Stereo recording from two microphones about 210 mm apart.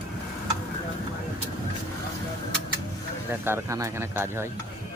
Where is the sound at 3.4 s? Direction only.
10° right (ahead or behind).